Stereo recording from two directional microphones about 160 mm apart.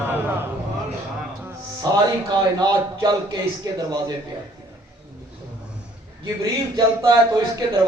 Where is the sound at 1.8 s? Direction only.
25° right (ahead or behind).